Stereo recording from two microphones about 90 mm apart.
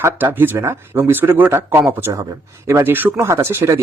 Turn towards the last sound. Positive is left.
turn(degrees=-30)  # may be behind; listen again after turning